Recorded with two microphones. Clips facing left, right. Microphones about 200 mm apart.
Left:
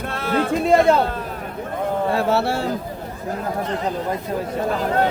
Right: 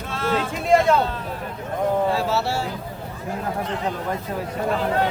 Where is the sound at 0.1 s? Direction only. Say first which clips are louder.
Left 3 dB; 60° left (ahead or behind).